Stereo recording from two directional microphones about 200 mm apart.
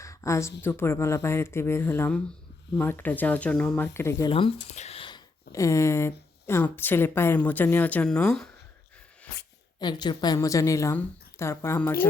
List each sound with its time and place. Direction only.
0.0 s a sound: 15° left (ahead or behind)
0.6 s a woman's voice: 10° left (ahead or behind)
4.2 s speech: 25° left (ahead or behind); by 8.4 s 5° left (ahead or behind)
9.8 s a woman's voice: 20° left (ahead or behind)